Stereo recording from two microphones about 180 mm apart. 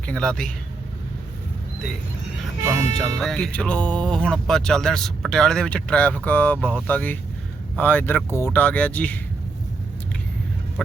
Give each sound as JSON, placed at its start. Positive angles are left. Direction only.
{"t": 0.1, "sound": "speech", "side_deg": 5}
{"t": 2.6, "sound": "speech", "side_deg": -15}
{"t": 3.2, "sound": "speech", "side_deg": 0}
{"t": 10.8, "sound": "speech", "side_deg": 0}